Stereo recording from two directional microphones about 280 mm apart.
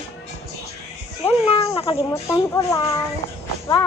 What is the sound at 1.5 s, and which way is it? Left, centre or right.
Speech, centre.